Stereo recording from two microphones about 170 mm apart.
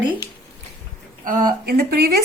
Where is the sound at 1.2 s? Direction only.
60° right (ahead or behind).